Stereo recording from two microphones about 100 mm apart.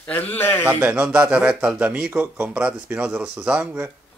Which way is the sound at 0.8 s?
10° right (ahead or behind).